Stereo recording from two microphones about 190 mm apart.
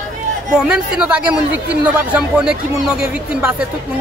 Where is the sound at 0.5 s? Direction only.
5° right (ahead or behind).